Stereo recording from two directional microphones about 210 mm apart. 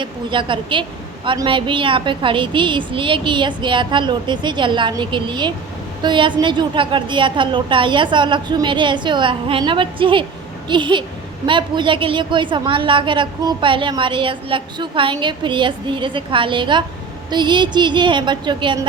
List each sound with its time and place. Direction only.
0.0 s a woman's voice: 25° right (ahead or behind)